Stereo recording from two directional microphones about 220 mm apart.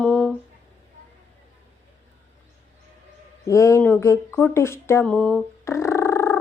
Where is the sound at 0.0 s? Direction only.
5° left (ahead or behind).